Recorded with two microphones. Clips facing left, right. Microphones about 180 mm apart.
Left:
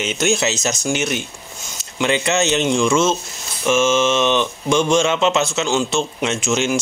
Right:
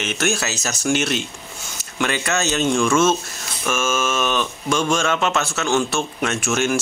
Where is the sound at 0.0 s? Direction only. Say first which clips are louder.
Left 4 dB; 15° left (ahead or behind).